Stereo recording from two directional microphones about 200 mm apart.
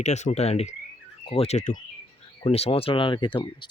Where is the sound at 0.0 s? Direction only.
35° left (ahead or behind).